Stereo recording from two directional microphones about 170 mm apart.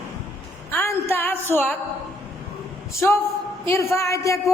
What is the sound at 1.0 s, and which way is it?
Music, 10° left (ahead or behind).